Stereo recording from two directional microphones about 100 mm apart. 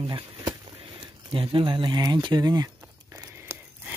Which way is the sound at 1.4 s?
60° right (ahead or behind).